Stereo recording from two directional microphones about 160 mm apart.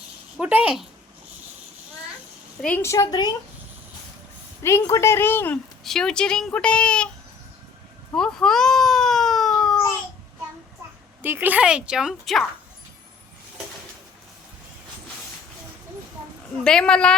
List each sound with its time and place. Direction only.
0.3 s speech: 10° right (ahead or behind)
2.6 s a woman's voice: 10° left (ahead or behind)
4.6 s a woman's voice: 15° left (ahead or behind)
5.8 s speech: 5° left (ahead or behind)
8.1 s baby cry: 5° left (ahead or behind)
11.2 s speech: 10° right (ahead or behind)
16.6 s speech: 5° left (ahead or behind)